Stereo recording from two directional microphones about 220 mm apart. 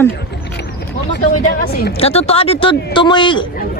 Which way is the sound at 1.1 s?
45° left (ahead or behind).